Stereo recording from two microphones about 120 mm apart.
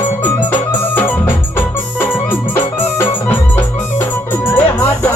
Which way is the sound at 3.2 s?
15° left (ahead or behind).